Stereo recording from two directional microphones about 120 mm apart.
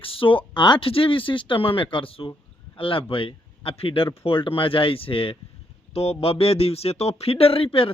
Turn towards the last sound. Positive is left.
turn(degrees=55)  # may be behind; listen again after turning